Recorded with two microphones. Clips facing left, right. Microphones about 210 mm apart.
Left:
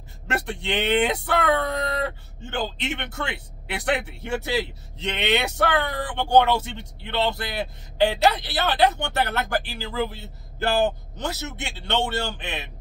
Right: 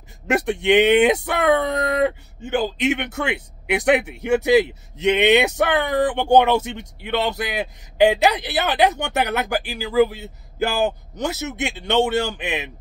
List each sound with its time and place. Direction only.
0.3 s speech: 15° right (ahead or behind)